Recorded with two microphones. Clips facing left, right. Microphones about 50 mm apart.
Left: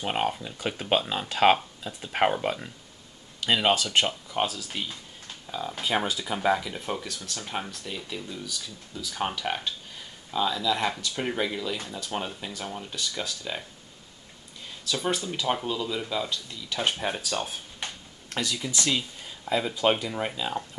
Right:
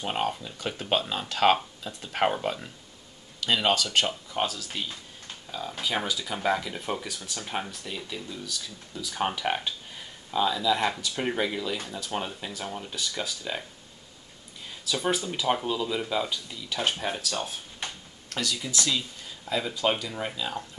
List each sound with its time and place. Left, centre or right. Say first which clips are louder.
0.0 s speech: left 1 dB; centre
4.3 s speech: left 1 dB; centre
5.8 s speech: left 2 dB; centre
6.3 s speech: left 2 dB; centre
14.9 s speech: right 1 dB; centre
17.0 s speech: left 1 dB; centre
18.3 s speech: left 1 dB; left
19.4 s speech: left 3 dB; centre